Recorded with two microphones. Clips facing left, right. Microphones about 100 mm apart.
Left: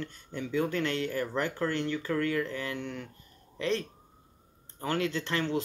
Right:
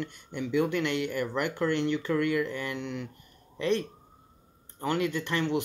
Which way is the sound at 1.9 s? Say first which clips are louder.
Right 3 dB; 20° right (ahead or behind).